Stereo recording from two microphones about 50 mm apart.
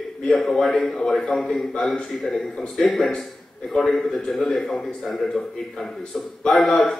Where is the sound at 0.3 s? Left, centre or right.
Centre.